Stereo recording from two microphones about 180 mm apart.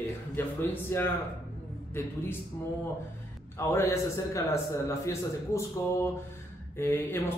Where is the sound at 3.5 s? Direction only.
15° left (ahead or behind).